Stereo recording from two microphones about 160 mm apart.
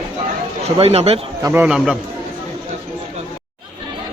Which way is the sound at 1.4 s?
15° right (ahead or behind).